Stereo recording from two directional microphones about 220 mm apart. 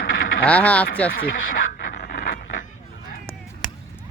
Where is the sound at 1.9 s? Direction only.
45° left (ahead or behind).